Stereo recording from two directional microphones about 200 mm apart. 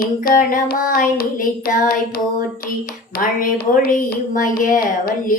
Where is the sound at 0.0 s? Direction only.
45° left (ahead or behind).